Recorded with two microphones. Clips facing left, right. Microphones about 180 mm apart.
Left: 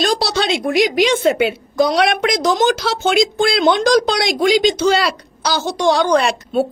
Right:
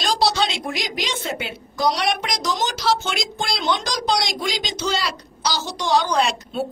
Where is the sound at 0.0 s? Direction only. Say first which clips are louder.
Left 3 dB; 60° left (ahead or behind).